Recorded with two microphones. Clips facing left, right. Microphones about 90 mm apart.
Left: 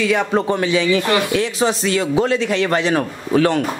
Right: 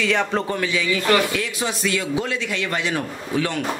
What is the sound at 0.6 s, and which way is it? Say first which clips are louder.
A man's voice: left 6 dB; 25° left (ahead or behind).